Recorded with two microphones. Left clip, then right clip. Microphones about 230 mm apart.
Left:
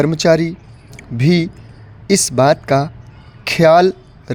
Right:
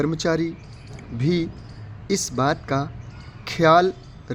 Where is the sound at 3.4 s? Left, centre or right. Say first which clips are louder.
Left 6 dB; left.